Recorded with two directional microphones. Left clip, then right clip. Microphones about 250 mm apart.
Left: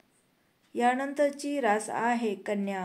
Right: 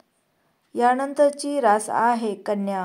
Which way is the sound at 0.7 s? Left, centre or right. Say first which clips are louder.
Right 7 dB; right.